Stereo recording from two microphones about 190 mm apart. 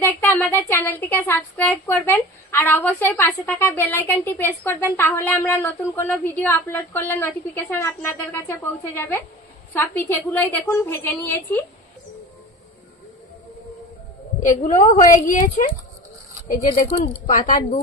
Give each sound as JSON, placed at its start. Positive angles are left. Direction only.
{"t": 0.0, "sound": "speech", "side_deg": 10}
{"t": 14.4, "sound": "speech", "side_deg": 40}
{"t": 17.0, "sound": "speech", "side_deg": 45}